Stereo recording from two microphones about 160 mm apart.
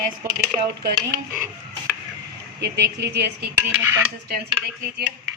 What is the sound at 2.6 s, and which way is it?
Speech, 90° right.